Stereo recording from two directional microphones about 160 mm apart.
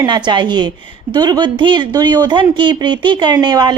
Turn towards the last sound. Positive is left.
turn(degrees=-25)  # may be behind; listen again after turning